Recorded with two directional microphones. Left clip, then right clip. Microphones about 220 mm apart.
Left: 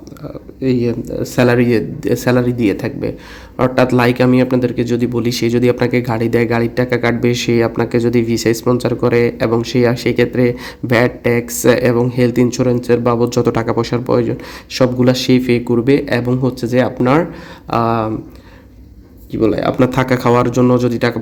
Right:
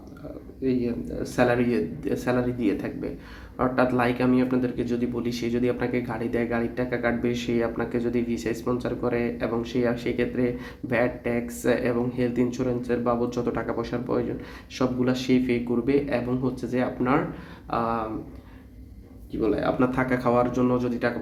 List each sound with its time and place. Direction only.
0.6 s speech: 50° left (ahead or behind)
19.4 s speech: 50° left (ahead or behind)